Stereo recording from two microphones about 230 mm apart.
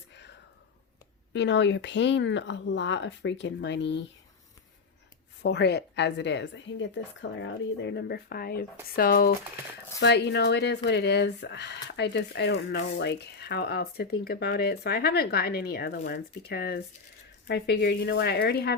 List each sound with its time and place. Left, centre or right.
1.3 s speech: left
5.4 s speech: left